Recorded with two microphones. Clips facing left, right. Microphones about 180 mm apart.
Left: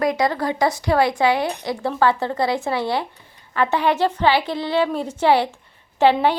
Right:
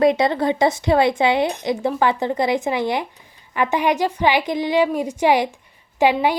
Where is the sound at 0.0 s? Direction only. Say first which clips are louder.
Right 4 dB; 25° right (ahead or behind).